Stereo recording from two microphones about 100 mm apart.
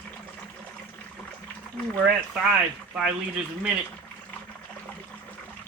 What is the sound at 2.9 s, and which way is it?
Speech, 10° right (ahead or behind).